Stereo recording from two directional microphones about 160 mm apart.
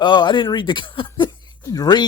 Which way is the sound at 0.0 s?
30° left (ahead or behind).